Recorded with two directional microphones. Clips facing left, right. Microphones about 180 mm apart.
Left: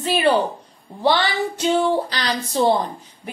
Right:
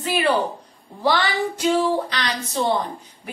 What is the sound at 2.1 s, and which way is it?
Speech, 35° left (ahead or behind).